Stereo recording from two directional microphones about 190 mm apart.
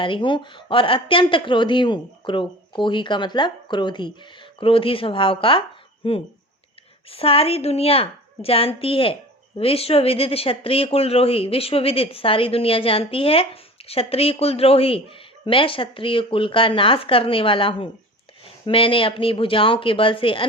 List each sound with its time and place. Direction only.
0.0 s speech: 25° left (ahead or behind)